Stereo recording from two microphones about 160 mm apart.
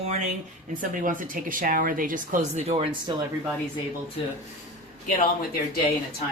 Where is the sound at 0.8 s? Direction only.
55° right (ahead or behind).